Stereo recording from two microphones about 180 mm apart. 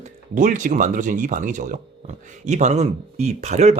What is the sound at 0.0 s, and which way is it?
Speech, 45° right (ahead or behind).